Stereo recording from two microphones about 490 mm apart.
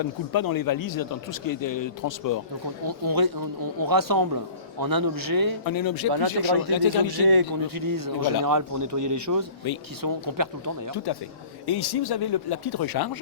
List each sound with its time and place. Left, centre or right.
0.0 s speech: left
2.8 s a man's voice: right
5.6 s speech: left
7.1 s a man's voice: right
10.9 s speech: left